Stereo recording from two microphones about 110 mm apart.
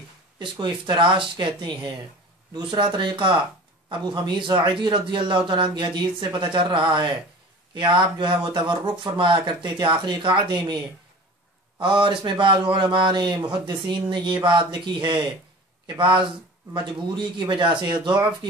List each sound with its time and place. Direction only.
0.4 s a man's voice: 45° right (ahead or behind)
11.8 s a man's voice: 50° right (ahead or behind)